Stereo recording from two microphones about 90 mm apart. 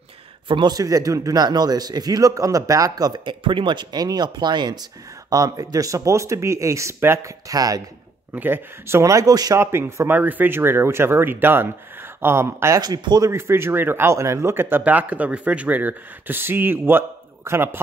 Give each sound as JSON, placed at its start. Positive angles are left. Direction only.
{"t": 0.5, "sound": "a man's voice", "side_deg": -55}
{"t": 3.3, "sound": "speech", "side_deg": -65}
{"t": 4.0, "sound": "a man's voice", "side_deg": -50}
{"t": 5.3, "sound": "speech", "side_deg": -40}
{"t": 7.4, "sound": "a man's voice", "side_deg": -45}
{"t": 8.3, "sound": "speech", "side_deg": -25}
{"t": 9.6, "sound": "speech", "side_deg": -30}
{"t": 12.8, "sound": "a man's voice", "side_deg": -50}
{"t": 13.3, "sound": "speech", "side_deg": -30}